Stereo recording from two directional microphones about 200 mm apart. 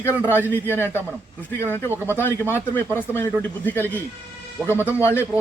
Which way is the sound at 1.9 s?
10° right (ahead or behind).